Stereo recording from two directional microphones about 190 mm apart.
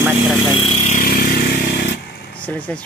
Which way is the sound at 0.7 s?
40° left (ahead or behind).